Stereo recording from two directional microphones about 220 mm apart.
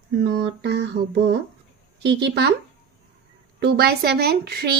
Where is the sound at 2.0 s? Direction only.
50° right (ahead or behind).